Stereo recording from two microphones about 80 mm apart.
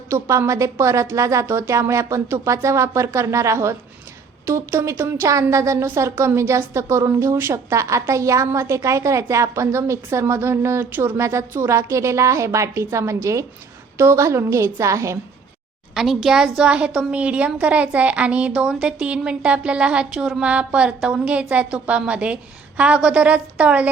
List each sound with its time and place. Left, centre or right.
0.1 s a woman's voice: right
11.2 s a woman's voice: right
16.0 s a woman's voice: centre